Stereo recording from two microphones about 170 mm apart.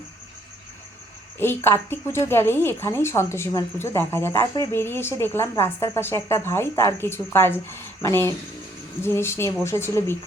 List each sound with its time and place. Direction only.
1.4 s a woman's voice: 15° left (ahead or behind)